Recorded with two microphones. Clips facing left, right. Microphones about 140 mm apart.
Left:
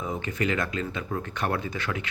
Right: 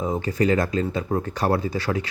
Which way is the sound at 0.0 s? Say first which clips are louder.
Right 7 dB; 35° right (ahead or behind).